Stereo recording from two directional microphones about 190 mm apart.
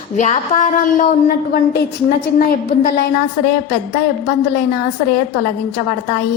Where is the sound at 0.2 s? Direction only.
40° left (ahead or behind).